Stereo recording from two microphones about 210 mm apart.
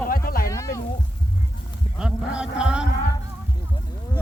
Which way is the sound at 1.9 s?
5° right (ahead or behind).